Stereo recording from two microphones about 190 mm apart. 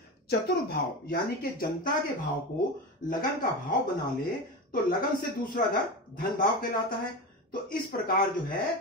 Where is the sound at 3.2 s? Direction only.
45° left (ahead or behind).